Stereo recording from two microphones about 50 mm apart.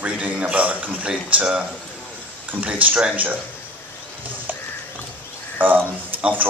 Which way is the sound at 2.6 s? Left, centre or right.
Right.